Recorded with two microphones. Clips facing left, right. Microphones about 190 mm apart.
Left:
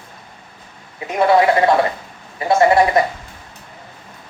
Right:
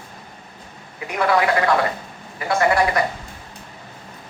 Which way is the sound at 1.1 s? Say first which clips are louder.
Left 5 dB; 25° left (ahead or behind).